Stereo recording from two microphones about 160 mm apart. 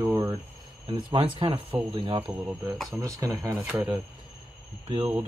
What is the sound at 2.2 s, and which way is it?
Speech, 15° right (ahead or behind).